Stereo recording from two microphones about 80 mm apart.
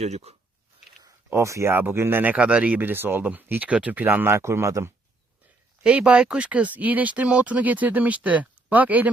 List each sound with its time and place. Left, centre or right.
1.3 s speech: right
5.8 s speech: centre